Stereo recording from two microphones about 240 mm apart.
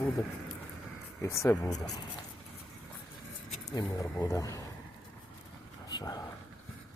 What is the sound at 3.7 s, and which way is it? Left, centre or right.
Speech, centre.